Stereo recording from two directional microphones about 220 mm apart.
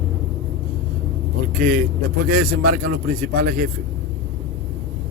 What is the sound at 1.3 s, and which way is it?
A man's voice, 40° right (ahead or behind).